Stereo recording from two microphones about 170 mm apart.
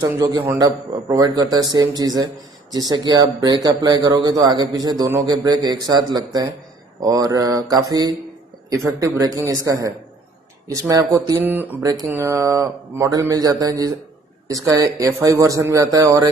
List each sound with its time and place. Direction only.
0.0 s a man's voice: 20° right (ahead or behind)
11.8 s a man's voice: 20° right (ahead or behind)